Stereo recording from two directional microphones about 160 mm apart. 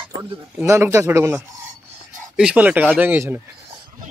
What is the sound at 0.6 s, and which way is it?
Speech, 15° right (ahead or behind).